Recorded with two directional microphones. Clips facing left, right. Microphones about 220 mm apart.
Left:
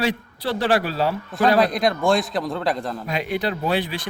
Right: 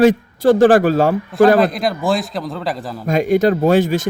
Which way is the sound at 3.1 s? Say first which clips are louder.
Right 12 dB; 45° right (ahead or behind).